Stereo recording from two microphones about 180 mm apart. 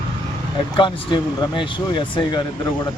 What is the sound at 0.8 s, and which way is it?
Speech, 25° left (ahead or behind).